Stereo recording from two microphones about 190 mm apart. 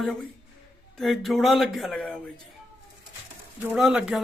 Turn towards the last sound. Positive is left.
turn(degrees=-5)  # may be behind; listen again after turning